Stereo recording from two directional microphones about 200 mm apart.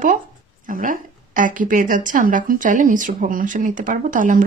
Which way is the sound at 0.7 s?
40° right (ahead or behind).